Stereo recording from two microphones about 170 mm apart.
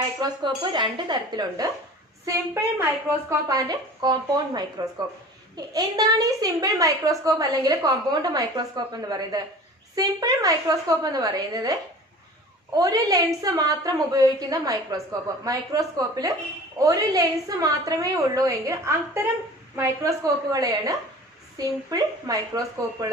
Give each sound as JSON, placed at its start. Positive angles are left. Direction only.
{"t": 0.2, "sound": "a woman's voice", "side_deg": -25}